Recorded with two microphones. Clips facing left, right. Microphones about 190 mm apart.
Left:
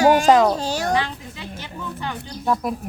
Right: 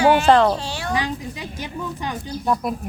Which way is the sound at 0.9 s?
15° right (ahead or behind).